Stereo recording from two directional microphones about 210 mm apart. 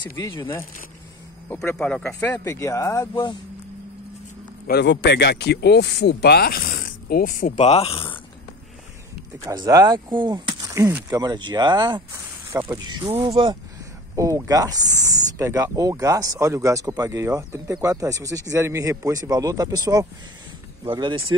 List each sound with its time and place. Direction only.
0.0 s speech: 20° left (ahead or behind)
1.5 s speech: 5° left (ahead or behind)
4.6 s speech: 55° left (ahead or behind); by 8.0 s 30° left (ahead or behind)
9.4 s speech: 15° right (ahead or behind)